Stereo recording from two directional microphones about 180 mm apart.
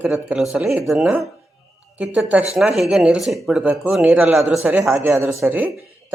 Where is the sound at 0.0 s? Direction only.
5° right (ahead or behind).